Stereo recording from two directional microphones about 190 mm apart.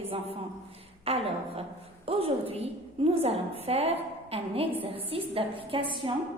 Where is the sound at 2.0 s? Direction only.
30° right (ahead or behind).